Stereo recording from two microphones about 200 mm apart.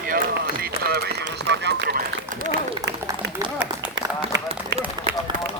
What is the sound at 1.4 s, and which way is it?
Run, 60° right (ahead or behind).